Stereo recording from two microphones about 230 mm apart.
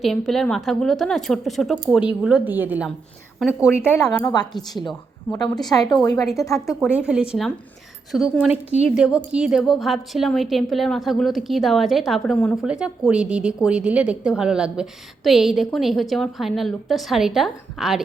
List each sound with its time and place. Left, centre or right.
0.0 s a woman's voice: centre
6.7 s a woman's voice: centre